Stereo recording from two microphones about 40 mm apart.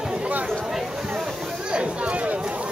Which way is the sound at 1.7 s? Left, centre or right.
Right.